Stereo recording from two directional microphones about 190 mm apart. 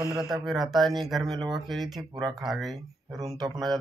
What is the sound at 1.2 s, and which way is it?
Speech, 20° right (ahead or behind).